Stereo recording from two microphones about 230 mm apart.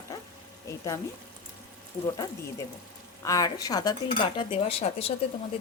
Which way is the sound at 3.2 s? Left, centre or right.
Centre.